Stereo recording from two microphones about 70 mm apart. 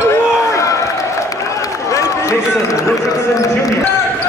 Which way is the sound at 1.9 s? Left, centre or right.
Left.